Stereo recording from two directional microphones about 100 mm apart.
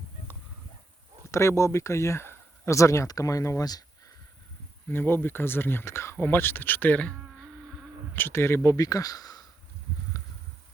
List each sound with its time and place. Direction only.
1.3 s speech: 30° left (ahead or behind)
4.9 s speech: 20° left (ahead or behind)
8.1 s speech: 20° left (ahead or behind); by 9.4 s 40° left (ahead or behind)